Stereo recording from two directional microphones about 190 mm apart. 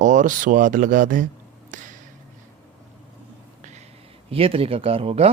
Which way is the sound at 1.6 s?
40° right (ahead or behind).